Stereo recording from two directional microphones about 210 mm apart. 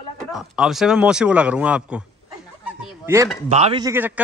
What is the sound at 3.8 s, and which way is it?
Speech, 10° right (ahead or behind).